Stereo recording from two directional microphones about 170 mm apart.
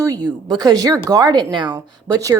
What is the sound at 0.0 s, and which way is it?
Speech, 20° right (ahead or behind).